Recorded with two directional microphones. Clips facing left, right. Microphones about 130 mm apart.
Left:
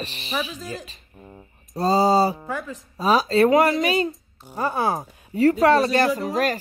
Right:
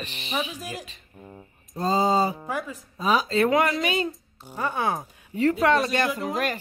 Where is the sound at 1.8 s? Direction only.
35° left (ahead or behind).